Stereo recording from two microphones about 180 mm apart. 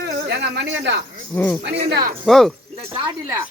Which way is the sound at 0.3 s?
65° right (ahead or behind).